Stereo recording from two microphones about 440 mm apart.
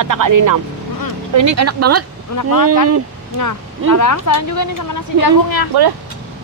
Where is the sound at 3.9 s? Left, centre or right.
Left.